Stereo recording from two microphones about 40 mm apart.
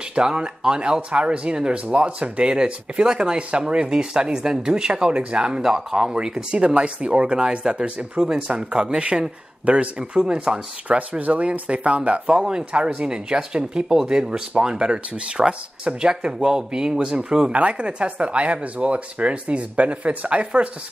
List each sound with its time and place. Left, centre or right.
0.1 s speech: centre
5.6 s speech: centre
8.2 s speech: centre
8.5 s speech: right
11.0 s speech: right